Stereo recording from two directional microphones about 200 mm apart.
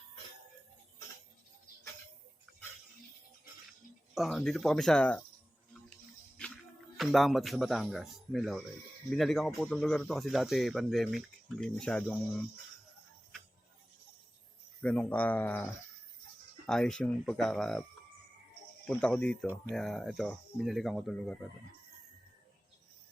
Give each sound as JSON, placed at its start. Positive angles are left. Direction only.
{"t": 4.1, "sound": "speech", "side_deg": 0}
{"t": 6.4, "sound": "music", "side_deg": 5}
{"t": 6.9, "sound": "speech", "side_deg": 0}
{"t": 14.8, "sound": "speech", "side_deg": 5}
{"t": 18.9, "sound": "speech", "side_deg": 5}